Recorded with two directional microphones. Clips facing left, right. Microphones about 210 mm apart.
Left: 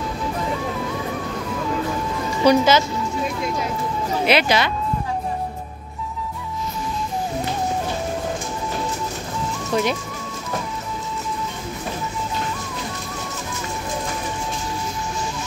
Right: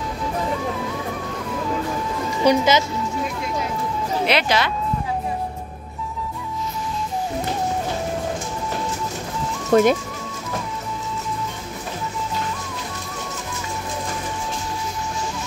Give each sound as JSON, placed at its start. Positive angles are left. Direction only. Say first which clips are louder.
{"t": 2.4, "sound": "a woman's voice", "louder": "left 2 dB", "side_deg": -15}
{"t": 4.3, "sound": "speech", "louder": "left 3 dB", "side_deg": 5}
{"t": 9.7, "sound": "speech", "louder": "right 7 dB", "side_deg": -50}